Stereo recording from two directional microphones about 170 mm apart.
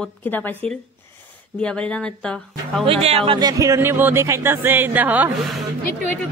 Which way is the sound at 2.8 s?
35° right (ahead or behind).